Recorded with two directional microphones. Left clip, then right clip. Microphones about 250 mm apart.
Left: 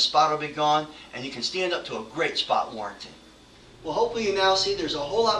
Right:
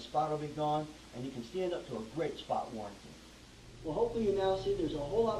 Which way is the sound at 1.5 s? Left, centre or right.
Left.